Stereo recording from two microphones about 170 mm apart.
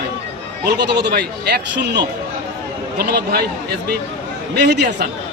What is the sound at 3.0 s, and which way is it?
Speech, 65° right (ahead or behind).